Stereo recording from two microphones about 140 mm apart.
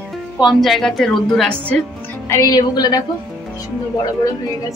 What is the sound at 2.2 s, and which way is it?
Speech, 25° left (ahead or behind).